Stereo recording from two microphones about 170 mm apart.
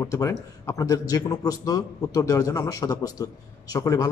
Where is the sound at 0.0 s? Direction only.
20° left (ahead or behind).